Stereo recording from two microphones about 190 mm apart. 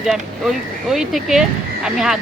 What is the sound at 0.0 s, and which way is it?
Speech, centre (ahead or behind).